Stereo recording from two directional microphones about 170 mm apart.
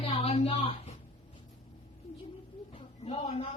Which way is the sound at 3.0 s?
35° left (ahead or behind).